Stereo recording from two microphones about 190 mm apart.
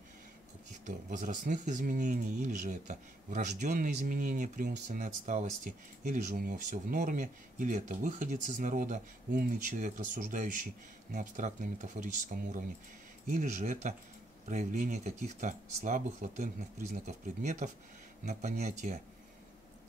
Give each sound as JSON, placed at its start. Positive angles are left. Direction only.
{"t": 0.8, "sound": "speech", "side_deg": -40}